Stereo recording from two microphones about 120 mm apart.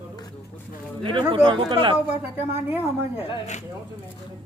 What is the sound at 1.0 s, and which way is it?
Speech, 45° right (ahead or behind).